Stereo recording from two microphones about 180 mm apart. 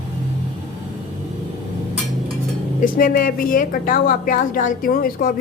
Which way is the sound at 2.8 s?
50° left (ahead or behind).